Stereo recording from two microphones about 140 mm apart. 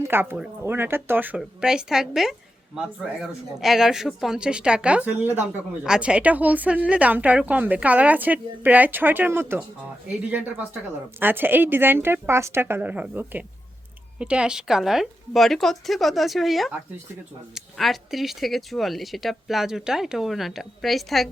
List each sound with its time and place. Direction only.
0.0 s speech: 15° right (ahead or behind)
11.2 s speech: 15° right (ahead or behind)